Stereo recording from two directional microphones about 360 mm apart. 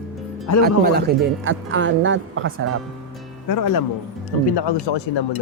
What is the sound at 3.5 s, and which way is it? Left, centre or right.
Speech, left.